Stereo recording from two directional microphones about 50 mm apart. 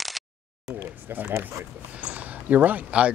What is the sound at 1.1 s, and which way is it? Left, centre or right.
Speech, right.